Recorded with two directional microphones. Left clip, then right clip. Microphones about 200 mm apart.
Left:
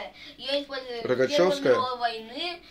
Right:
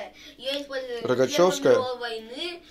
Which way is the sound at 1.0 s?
20° right (ahead or behind).